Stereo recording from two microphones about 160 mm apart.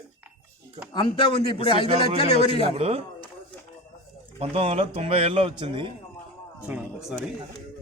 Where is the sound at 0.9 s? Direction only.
30° left (ahead or behind).